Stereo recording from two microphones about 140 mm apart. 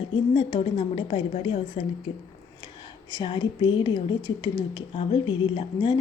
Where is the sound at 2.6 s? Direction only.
30° left (ahead or behind).